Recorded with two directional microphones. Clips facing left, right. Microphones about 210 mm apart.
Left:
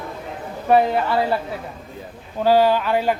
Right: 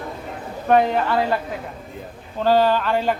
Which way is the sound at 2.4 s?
10° left (ahead or behind).